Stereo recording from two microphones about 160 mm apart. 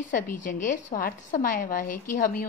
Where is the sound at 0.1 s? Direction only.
55° left (ahead or behind).